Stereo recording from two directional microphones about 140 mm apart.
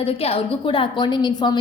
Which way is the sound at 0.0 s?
45° left (ahead or behind).